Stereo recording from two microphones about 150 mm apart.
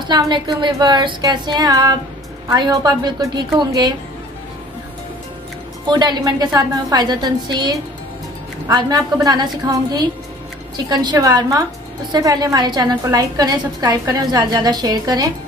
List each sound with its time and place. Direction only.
0.0 s a woman's voice: 30° right (ahead or behind)
5.9 s a woman's voice: 30° right (ahead or behind)